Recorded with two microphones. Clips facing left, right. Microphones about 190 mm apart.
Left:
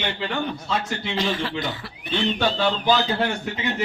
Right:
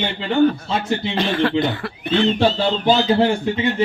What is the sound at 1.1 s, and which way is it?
Speech, 60° right (ahead or behind).